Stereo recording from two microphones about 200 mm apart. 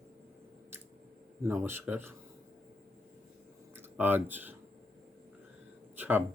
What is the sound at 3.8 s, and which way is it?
Speech, 10° right (ahead or behind).